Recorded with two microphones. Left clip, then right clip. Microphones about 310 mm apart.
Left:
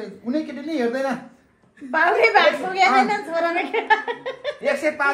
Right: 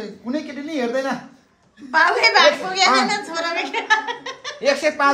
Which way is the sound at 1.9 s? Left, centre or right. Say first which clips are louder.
Right 1 dB; centre.